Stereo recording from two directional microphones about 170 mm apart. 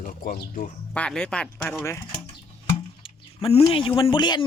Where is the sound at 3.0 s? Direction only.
35° left (ahead or behind).